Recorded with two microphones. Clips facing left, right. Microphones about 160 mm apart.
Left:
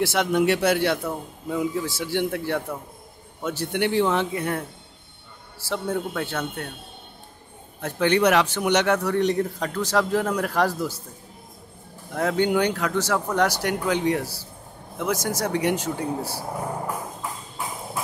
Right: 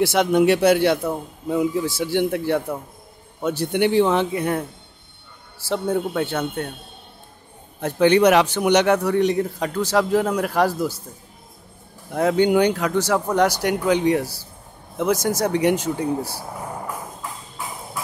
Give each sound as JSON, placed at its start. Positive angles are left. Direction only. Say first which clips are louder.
{"t": 0.0, "sound": "a man's voice", "louder": "right 4 dB", "side_deg": -20}
{"t": 5.7, "sound": "a man's voice", "louder": "right 4 dB", "side_deg": -20}
{"t": 7.8, "sound": "speech", "louder": "right 5 dB", "side_deg": -20}
{"t": 12.1, "sound": "a man's voice", "louder": "right 4 dB", "side_deg": -15}